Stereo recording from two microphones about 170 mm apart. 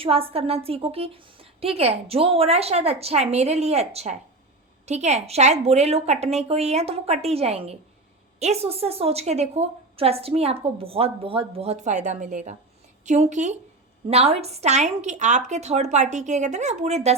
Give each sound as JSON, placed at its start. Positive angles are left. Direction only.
{"t": 0.0, "sound": "a woman's voice", "side_deg": -35}